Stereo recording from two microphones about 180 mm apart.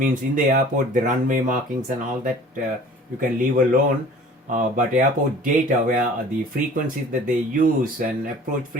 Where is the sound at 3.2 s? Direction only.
50° right (ahead or behind).